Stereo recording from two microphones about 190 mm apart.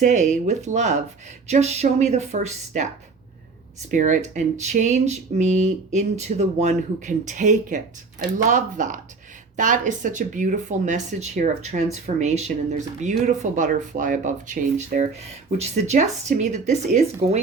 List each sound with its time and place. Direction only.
0.0 s speech: 40° right (ahead or behind)
3.9 s speech: 40° right (ahead or behind)